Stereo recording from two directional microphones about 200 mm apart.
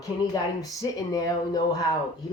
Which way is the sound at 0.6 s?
15° left (ahead or behind).